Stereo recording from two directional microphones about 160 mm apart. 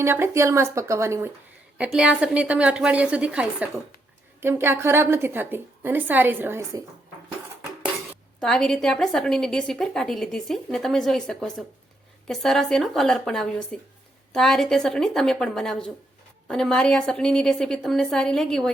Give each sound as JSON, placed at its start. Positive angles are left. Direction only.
{"t": 0.0, "sound": "a woman's voice", "side_deg": -15}
{"t": 8.4, "sound": "a woman's voice", "side_deg": 5}